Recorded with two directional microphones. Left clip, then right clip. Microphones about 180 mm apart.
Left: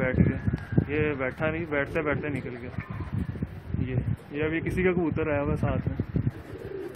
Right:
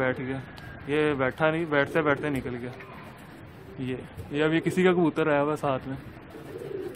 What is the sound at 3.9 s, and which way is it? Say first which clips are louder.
Speech: right 4 dB; 25° right (ahead or behind).